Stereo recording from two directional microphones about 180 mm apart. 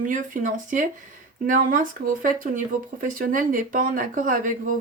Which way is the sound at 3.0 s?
50° right (ahead or behind).